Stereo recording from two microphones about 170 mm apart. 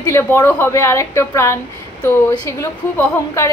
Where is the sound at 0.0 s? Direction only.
15° left (ahead or behind).